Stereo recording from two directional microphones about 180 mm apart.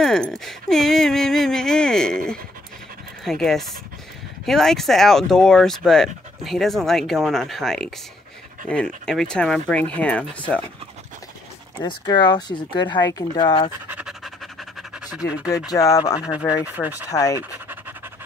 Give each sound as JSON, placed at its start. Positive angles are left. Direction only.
{"t": 0.0, "sound": "speech", "side_deg": 5}
{"t": 11.8, "sound": "speech", "side_deg": 25}
{"t": 13.7, "sound": "pant", "side_deg": -10}
{"t": 15.7, "sound": "speech", "side_deg": 20}
{"t": 16.2, "sound": "speech", "side_deg": -5}
{"t": 17.1, "sound": "speech", "side_deg": 20}
{"t": 17.4, "sound": "pant", "side_deg": -10}